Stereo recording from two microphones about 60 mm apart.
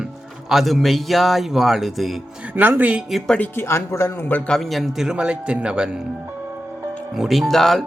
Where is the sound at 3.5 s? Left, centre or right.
Left.